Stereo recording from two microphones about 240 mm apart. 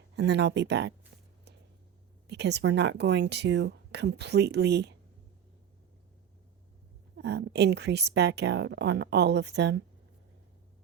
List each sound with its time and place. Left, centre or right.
0.2 s speech: right
2.2 s speech: right
7.2 s speech: right